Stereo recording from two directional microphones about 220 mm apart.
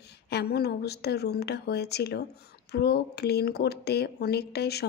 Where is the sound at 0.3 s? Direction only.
50° left (ahead or behind).